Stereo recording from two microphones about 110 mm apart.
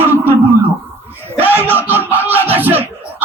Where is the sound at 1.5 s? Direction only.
15° right (ahead or behind).